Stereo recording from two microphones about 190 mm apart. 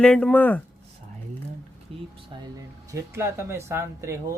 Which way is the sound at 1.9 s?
30° right (ahead or behind).